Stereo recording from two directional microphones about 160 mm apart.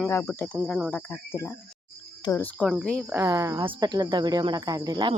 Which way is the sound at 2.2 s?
15° left (ahead or behind).